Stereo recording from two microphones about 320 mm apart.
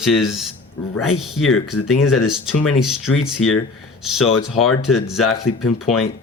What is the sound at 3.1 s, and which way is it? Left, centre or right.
Speech, left.